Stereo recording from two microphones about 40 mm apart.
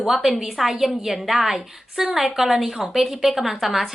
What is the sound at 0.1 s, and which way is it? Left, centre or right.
A woman's voice, centre.